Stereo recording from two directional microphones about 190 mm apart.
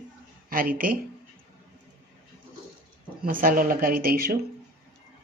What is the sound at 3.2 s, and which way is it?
Speech, 45° right (ahead or behind).